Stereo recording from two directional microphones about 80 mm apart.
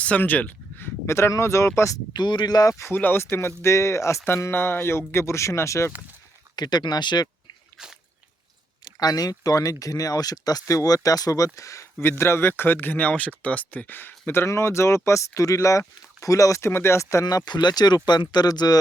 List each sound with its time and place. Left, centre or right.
0.0 s speech: centre; by 2.0 s left
2.1 s speech: left
2.9 s speech: left
6.6 s speech: left
8.8 s speech: left
17.2 s speech: left